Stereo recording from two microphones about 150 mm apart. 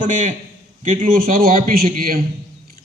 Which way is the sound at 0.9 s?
65° right (ahead or behind).